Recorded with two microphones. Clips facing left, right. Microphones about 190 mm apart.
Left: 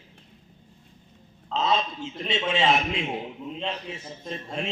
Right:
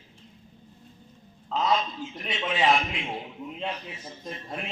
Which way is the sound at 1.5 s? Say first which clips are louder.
Even; 25° left (ahead or behind).